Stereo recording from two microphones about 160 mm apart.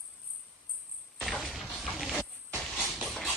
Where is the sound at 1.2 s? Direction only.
Centre (ahead or behind).